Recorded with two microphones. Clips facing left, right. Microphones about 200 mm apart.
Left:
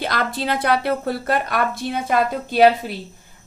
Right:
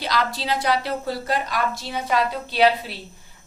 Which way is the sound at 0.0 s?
55° left (ahead or behind).